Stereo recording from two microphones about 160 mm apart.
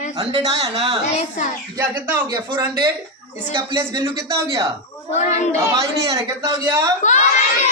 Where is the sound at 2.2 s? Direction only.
25° right (ahead or behind).